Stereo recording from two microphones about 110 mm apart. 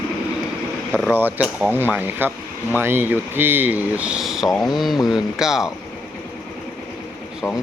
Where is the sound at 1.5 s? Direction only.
15° right (ahead or behind).